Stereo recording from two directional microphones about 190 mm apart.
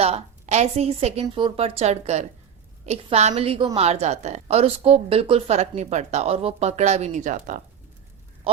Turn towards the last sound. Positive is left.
turn(degrees=-40)  # may be behind; listen again after turning